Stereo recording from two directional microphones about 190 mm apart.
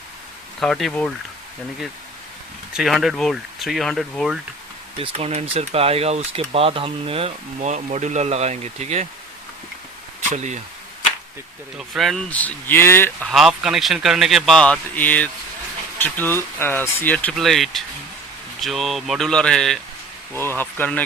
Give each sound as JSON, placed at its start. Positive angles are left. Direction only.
{"t": 0.6, "sound": "speech", "side_deg": 0}
{"t": 2.7, "sound": "speech", "side_deg": 0}
{"t": 4.9, "sound": "speech", "side_deg": -30}
{"t": 10.2, "sound": "speech", "side_deg": -40}
{"t": 11.8, "sound": "speech", "side_deg": 0}
{"t": 13.3, "sound": "speech", "side_deg": 0}